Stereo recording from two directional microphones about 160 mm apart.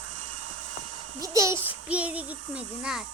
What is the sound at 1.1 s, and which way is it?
A child's voice, 20° right (ahead or behind).